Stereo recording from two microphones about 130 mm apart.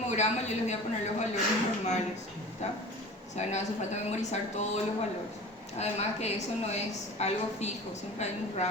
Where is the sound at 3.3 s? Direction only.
60° left (ahead or behind).